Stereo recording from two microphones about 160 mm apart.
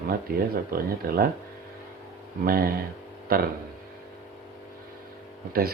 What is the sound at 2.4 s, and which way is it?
Speech, 65° right (ahead or behind).